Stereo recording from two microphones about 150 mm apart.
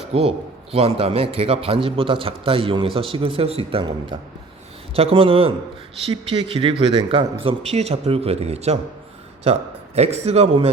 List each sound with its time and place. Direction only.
0.1 s a man's voice: 40° right (ahead or behind)